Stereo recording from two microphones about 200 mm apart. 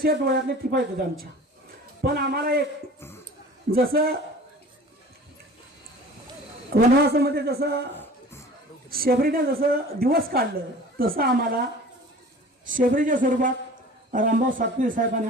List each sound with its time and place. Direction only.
0.0 s a woman's voice: 50° right (ahead or behind)
2.0 s a woman's voice: 55° right (ahead or behind)
3.7 s a woman's voice: 50° right (ahead or behind)
6.7 s a woman's voice: 55° right (ahead or behind)
7.9 s a sound: 10° left (ahead or behind)
8.9 s a woman's voice: 50° right (ahead or behind)
12.6 s a woman's voice: 40° right (ahead or behind)